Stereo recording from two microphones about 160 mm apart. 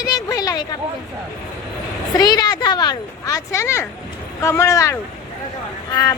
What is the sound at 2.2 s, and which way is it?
Speech, 25° left (ahead or behind).